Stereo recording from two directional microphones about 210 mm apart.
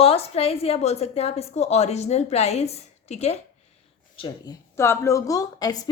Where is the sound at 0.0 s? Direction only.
30° left (ahead or behind).